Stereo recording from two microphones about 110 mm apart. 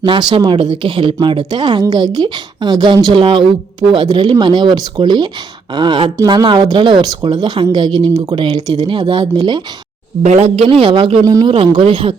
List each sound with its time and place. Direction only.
0.0 s a woman's voice: 45° right (ahead or behind)
10.2 s speech: 80° right
10.7 s speech: 50° right (ahead or behind)
11.2 s a woman's voice: 30° right (ahead or behind)
11.4 s speech: 55° right (ahead or behind)